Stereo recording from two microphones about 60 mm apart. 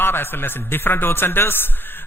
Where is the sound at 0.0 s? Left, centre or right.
Left.